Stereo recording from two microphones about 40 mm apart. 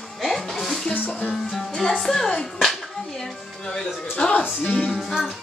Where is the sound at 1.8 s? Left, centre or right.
Centre.